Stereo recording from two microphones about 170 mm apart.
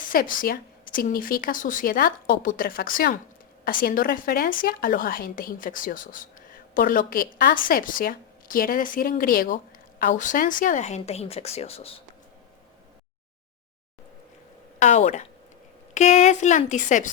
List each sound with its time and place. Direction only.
0.1 s speech: 55° left (ahead or behind); by 12.0 s 35° left (ahead or behind)
14.8 s a woman's voice: 45° left (ahead or behind)